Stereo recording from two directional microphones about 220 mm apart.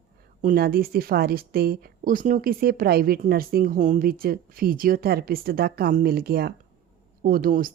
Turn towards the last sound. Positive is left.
turn(degrees=-40)  # may be behind; listen again after turning